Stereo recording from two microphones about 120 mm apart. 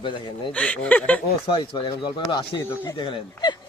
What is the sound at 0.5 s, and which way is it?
Speech, 10° left (ahead or behind).